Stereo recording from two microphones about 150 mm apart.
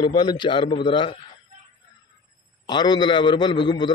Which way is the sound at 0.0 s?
30° left (ahead or behind).